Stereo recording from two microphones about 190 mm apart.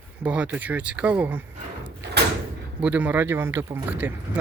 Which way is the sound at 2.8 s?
10° right (ahead or behind).